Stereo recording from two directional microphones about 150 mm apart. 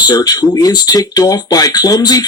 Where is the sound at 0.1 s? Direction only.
25° left (ahead or behind).